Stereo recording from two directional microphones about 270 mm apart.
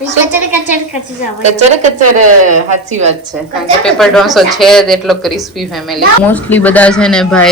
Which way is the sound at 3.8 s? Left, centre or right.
Centre.